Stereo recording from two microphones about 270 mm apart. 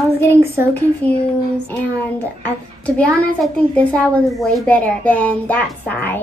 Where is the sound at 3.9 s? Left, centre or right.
Centre.